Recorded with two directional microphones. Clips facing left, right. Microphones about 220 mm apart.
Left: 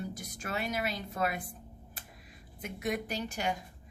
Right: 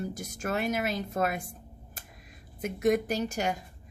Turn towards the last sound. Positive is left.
turn(degrees=-45)  # may be behind; listen again after turning